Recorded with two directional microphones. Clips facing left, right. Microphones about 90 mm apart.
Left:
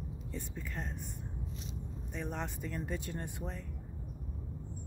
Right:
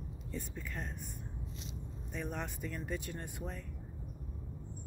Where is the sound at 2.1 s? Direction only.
25° left (ahead or behind).